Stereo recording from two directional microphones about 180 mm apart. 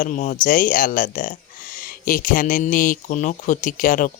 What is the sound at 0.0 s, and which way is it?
Speech, 45° left (ahead or behind).